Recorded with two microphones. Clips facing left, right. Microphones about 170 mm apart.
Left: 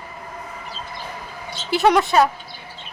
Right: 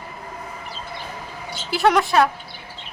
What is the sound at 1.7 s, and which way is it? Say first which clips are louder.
Speech: left 1 dB; centre (ahead or behind).